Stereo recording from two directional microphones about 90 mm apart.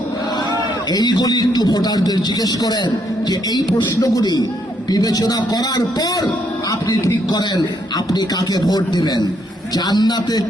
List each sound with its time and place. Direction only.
0.9 s a man's voice: 50° left (ahead or behind)